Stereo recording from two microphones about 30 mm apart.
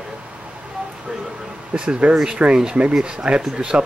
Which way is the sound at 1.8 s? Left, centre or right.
Right.